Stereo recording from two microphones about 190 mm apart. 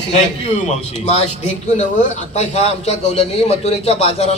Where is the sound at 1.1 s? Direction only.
35° left (ahead or behind).